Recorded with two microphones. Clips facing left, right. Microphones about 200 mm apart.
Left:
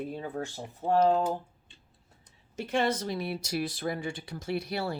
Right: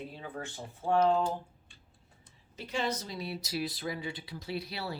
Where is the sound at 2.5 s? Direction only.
50° left (ahead or behind).